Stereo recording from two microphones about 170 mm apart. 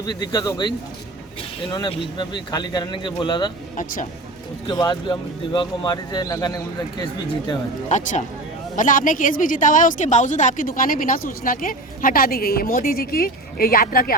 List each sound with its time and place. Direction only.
0.0 s speech: 25° left (ahead or behind)
1.7 s speech: 25° left (ahead or behind)
4.6 s speech: 25° left (ahead or behind)
7.9 s a woman's voice: 45° left (ahead or behind)